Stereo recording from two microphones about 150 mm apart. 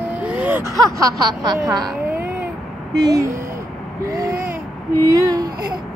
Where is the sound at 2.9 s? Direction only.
25° right (ahead or behind).